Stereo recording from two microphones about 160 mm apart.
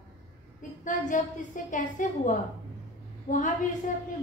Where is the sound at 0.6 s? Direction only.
55° left (ahead or behind).